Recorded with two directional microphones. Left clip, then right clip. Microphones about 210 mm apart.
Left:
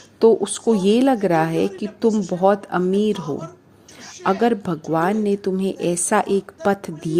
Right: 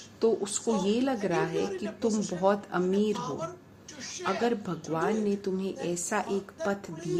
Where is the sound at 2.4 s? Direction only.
35° left (ahead or behind).